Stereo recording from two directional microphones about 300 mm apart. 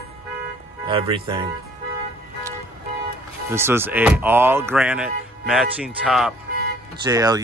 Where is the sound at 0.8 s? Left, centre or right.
Centre.